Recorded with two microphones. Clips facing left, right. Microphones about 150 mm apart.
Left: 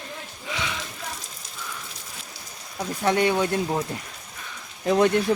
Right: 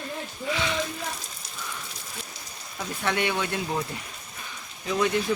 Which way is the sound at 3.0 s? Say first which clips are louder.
Left 6 dB; 35° left (ahead or behind).